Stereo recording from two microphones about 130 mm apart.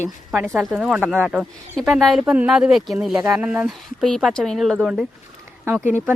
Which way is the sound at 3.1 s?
30° right (ahead or behind).